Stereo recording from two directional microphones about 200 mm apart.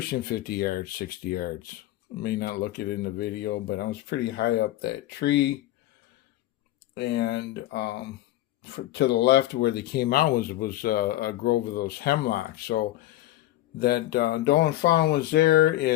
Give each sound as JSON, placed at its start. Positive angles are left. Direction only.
{"t": 0.1, "sound": "speech", "side_deg": 50}
{"t": 6.9, "sound": "speech", "side_deg": 55}